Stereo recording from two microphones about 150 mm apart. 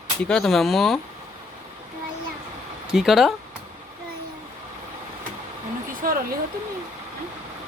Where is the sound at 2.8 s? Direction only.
5° right (ahead or behind).